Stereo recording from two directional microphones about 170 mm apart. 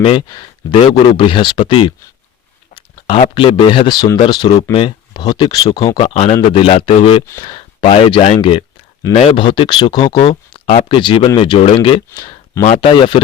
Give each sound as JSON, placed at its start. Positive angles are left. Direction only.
{"t": 0.0, "sound": "speech", "side_deg": 30}
{"t": 3.1, "sound": "speech", "side_deg": 30}
{"t": 6.0, "sound": "speech", "side_deg": 35}
{"t": 12.6, "sound": "speech", "side_deg": 45}
{"t": 12.9, "sound": "speech", "side_deg": 30}